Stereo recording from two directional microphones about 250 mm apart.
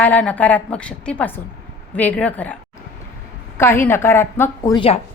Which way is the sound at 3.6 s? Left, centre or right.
Centre.